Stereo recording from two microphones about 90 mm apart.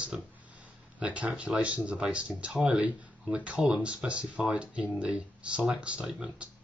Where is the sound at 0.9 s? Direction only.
15° right (ahead or behind).